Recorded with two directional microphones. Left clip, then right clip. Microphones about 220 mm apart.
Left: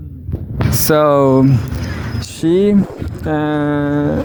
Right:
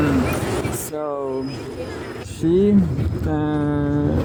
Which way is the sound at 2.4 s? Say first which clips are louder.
Left 4 dB; 55° left (ahead or behind).